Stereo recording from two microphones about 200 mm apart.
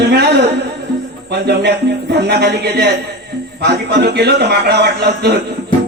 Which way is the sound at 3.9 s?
55° right (ahead or behind).